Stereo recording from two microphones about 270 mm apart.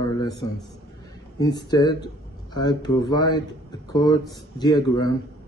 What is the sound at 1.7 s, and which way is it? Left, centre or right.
Speech, centre.